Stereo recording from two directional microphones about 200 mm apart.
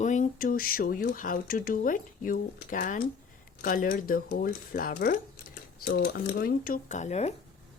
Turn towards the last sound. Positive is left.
turn(degrees=35)  # may be behind; listen again after turning